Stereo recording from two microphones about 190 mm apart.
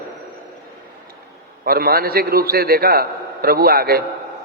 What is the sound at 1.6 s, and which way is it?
A man's voice, 50° right (ahead or behind).